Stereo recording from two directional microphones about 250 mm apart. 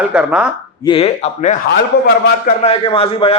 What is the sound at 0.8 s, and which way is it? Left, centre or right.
Speech, left.